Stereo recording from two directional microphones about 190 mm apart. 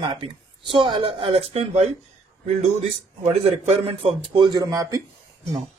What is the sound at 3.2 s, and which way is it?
Speech, 30° right (ahead or behind).